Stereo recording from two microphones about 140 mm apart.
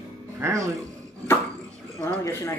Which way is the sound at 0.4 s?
20° right (ahead or behind).